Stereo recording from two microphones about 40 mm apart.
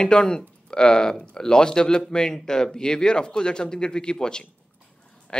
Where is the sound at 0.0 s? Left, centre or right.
Centre.